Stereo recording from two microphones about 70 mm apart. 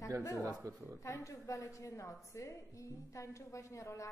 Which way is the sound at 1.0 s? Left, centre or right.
Left.